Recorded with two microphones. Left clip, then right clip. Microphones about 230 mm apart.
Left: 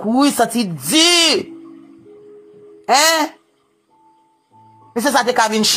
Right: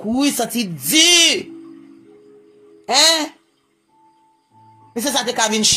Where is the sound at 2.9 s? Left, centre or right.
Centre.